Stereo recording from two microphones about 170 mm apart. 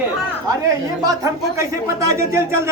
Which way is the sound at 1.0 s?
20° right (ahead or behind).